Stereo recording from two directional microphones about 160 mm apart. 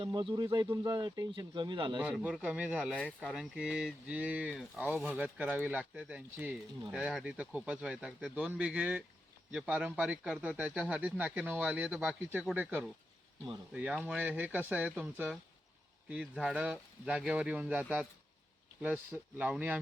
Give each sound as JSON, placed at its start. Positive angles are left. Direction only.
{"t": 0.0, "sound": "speech", "side_deg": -30}
{"t": 2.0, "sound": "speech", "side_deg": -5}
{"t": 2.9, "sound": "speech", "side_deg": 5}
{"t": 19.4, "sound": "speech", "side_deg": -10}